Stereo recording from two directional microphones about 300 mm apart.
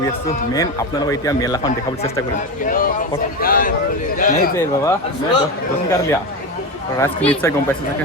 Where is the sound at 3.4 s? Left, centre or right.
Left.